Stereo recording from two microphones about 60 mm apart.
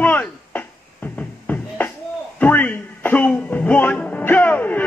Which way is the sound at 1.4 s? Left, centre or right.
Left.